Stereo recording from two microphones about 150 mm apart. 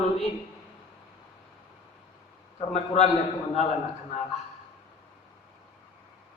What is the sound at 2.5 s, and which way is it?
Speech, 45° left (ahead or behind).